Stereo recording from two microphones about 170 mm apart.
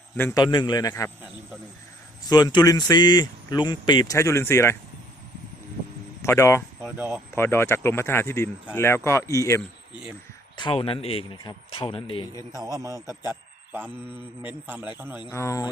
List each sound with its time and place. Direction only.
0.2 s speech: 15° left (ahead or behind)
0.4 s speech: 25° left (ahead or behind)
2.3 s speech: 25° left (ahead or behind)
6.2 s speech: 15° left (ahead or behind)
6.8 s a man's voice: 10° right (ahead or behind)
7.3 s speech: 15° left (ahead or behind)
10.6 s speech: 30° left (ahead or behind)
12.5 s a man's voice: 20° right (ahead or behind)
14.4 s a man's voice: 10° right (ahead or behind)
15.3 s speech: 15° left (ahead or behind)